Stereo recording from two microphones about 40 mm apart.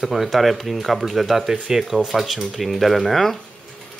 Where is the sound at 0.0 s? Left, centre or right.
Centre.